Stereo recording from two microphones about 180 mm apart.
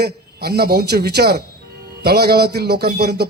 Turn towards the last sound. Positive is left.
turn(degrees=-65)  # may be behind; listen again after turning